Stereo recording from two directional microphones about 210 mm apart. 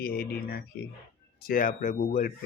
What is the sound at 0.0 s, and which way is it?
Speech, 45° left (ahead or behind).